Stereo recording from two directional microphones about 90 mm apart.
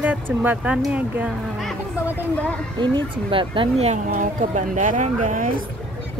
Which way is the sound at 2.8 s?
65° right (ahead or behind).